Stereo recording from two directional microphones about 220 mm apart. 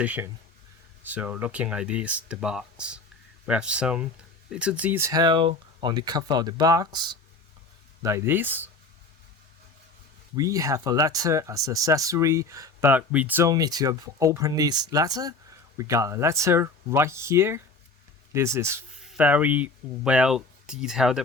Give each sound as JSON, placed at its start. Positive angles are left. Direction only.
{"t": 0.0, "sound": "speech", "side_deg": -5}
{"t": 10.3, "sound": "speech", "side_deg": -15}